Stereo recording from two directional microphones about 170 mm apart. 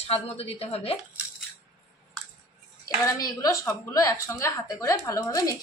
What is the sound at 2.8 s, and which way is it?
A woman's voice, 20° left (ahead or behind).